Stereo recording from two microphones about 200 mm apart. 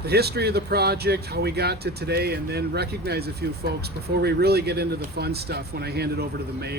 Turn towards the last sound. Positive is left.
turn(degrees=-55)  # may be behind; listen again after turning